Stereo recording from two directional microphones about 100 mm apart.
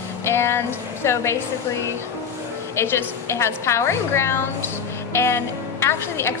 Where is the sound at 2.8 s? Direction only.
25° left (ahead or behind).